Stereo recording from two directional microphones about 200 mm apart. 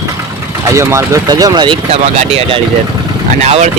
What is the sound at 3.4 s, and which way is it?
Speech, 35° right (ahead or behind).